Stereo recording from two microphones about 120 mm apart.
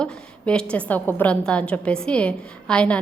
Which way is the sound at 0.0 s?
10° left (ahead or behind).